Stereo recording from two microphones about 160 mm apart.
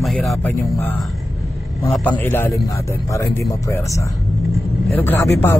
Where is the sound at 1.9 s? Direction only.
10° left (ahead or behind).